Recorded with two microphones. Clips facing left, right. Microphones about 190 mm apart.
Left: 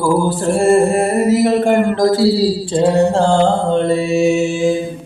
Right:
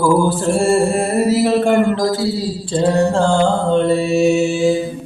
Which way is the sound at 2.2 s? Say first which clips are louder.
Left 7 dB; 90° left.